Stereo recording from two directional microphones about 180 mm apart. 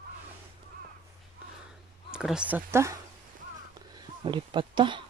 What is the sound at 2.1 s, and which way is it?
Speech, 5° right (ahead or behind).